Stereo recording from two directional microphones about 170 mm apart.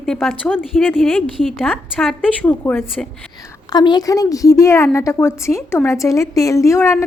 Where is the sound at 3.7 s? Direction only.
25° left (ahead or behind).